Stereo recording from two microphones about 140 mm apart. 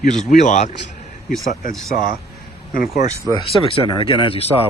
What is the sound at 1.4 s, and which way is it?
Speech, 75° left (ahead or behind).